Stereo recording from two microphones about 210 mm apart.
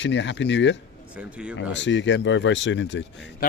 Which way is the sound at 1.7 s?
60° left (ahead or behind).